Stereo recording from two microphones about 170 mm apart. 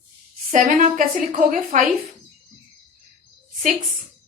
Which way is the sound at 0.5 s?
50° right (ahead or behind).